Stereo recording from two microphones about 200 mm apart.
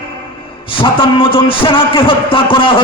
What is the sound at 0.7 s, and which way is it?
A man's voice, 25° left (ahead or behind).